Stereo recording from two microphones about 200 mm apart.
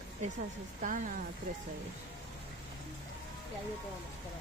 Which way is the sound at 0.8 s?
40° right (ahead or behind).